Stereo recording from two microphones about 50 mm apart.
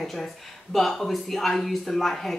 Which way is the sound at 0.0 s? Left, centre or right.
Centre.